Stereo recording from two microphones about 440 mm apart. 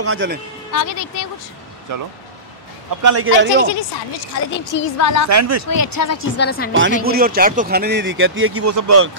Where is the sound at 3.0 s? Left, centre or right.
Right.